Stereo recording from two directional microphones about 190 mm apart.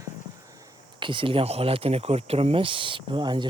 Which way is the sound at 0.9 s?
25° right (ahead or behind).